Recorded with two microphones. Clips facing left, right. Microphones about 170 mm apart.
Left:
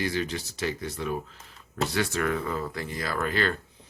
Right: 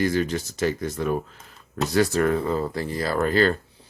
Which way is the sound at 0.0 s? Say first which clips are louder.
Right 6 dB; 45° right (ahead or behind).